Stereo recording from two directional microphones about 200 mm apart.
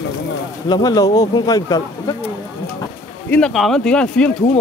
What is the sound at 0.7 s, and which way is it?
Speech, 20° left (ahead or behind).